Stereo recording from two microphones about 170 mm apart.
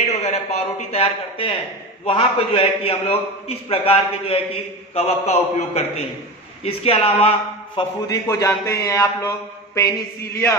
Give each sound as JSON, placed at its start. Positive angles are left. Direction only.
{"t": 0.0, "sound": "a sound", "side_deg": 40}
{"t": 2.0, "sound": "a man's voice", "side_deg": 35}
{"t": 8.1, "sound": "a man's voice", "side_deg": 20}